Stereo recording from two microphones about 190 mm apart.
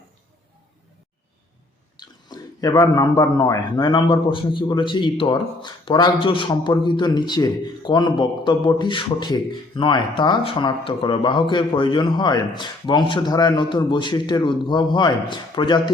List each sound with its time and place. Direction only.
2.0 s a man's voice: 20° left (ahead or behind)